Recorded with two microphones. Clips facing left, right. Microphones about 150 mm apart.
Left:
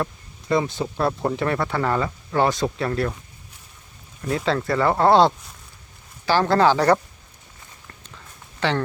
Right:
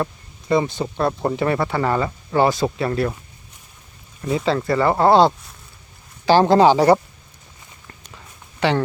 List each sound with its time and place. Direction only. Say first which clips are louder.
0.0 s speech: right 2 dB; centre (ahead or behind)
4.3 s speech: right 3 dB; centre (ahead or behind)
6.2 s speech: right 5 dB; 20° right (ahead or behind)
8.6 s speech: right 4 dB; 15° right (ahead or behind)